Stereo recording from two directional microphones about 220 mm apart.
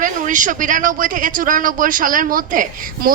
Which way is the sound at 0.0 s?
35° right (ahead or behind).